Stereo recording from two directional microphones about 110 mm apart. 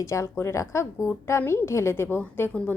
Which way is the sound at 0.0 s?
25° left (ahead or behind).